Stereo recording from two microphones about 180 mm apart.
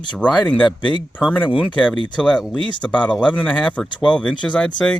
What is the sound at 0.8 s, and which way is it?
Speech, 25° left (ahead or behind).